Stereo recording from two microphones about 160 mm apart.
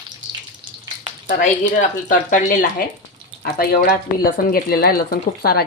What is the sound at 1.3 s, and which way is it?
Speech, 60° left (ahead or behind).